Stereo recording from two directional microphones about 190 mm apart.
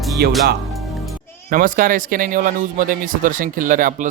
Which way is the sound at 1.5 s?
45° right (ahead or behind).